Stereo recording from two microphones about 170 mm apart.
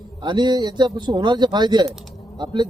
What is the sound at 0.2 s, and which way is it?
Speech, 25° right (ahead or behind).